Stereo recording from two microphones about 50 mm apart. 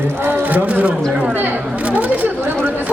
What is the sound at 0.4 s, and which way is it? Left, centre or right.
Speech, right.